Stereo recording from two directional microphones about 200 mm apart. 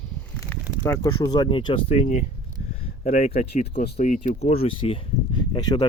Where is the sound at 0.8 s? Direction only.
15° left (ahead or behind).